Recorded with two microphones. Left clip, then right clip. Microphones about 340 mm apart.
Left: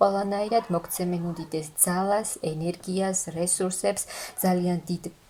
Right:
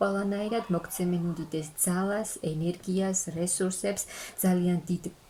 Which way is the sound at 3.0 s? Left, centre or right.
Centre.